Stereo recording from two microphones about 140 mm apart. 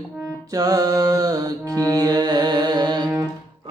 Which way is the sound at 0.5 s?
25° right (ahead or behind).